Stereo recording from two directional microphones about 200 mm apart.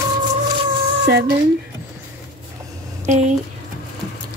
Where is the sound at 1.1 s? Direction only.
55° right (ahead or behind).